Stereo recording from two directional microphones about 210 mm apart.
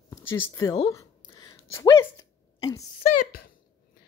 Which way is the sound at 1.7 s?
15° left (ahead or behind).